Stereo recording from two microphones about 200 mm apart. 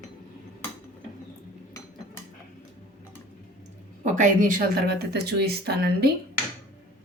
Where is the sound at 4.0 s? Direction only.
40° right (ahead or behind).